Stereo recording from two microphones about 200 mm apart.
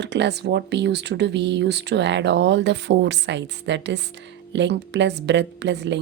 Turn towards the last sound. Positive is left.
turn(degrees=-60)  # may be behind; listen again after turning